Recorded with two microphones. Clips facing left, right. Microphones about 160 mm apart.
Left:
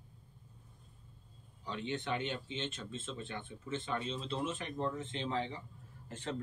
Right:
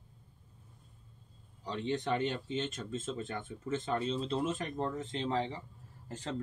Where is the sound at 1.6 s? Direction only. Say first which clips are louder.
Right 4 dB; 35° right (ahead or behind).